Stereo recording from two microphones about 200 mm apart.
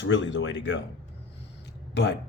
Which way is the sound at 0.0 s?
65° left (ahead or behind).